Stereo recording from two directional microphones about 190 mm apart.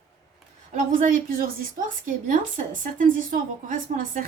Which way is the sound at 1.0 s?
45° right (ahead or behind).